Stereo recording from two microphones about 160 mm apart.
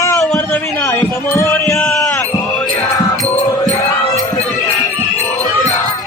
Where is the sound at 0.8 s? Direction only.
15° left (ahead or behind).